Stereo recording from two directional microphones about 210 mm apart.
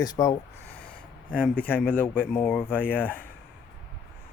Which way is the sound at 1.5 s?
10° left (ahead or behind).